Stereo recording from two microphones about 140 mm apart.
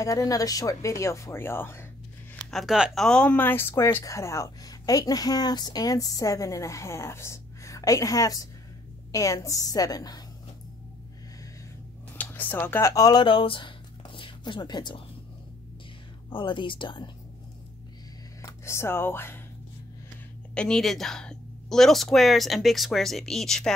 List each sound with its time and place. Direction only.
0.0 s speech: 25° left (ahead or behind)
2.5 s speech: 5° right (ahead or behind); by 10.2 s 25° left (ahead or behind)
12.2 s speech: 10° left (ahead or behind); by 15.0 s 30° left (ahead or behind)
16.3 s speech: 35° left (ahead or behind)
18.4 s speech: 20° left (ahead or behind)
20.5 s speech: 5° left (ahead or behind)